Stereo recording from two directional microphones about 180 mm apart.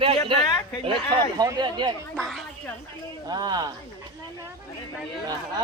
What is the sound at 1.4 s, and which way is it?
Speech, 20° right (ahead or behind).